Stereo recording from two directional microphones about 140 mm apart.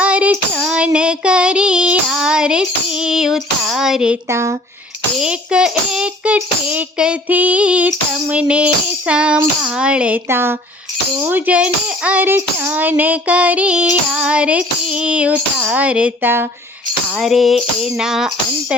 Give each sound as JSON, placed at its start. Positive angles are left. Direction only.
{"t": 0.0, "sound": "child singing", "side_deg": -10}
{"t": 4.3, "sound": "speech", "side_deg": -20}
{"t": 5.1, "sound": "a child's voice", "side_deg": -5}
{"t": 17.2, "sound": "music", "side_deg": 0}